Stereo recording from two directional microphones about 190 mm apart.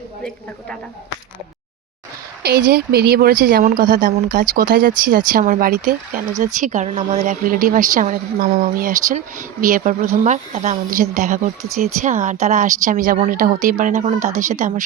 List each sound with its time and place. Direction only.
2.4 s a woman's voice: 55° right (ahead or behind)